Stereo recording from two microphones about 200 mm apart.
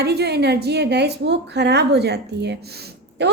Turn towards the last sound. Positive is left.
turn(degrees=-60)  # may be behind; listen again after turning